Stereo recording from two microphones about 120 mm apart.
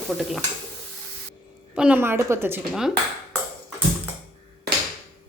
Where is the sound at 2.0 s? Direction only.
20° right (ahead or behind).